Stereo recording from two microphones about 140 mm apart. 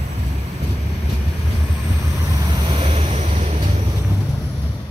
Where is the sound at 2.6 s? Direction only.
45° right (ahead or behind).